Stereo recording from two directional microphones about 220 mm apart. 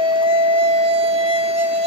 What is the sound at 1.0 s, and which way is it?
Music, 25° right (ahead or behind).